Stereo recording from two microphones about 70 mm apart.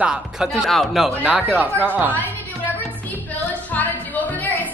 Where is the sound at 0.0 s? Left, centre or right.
Centre.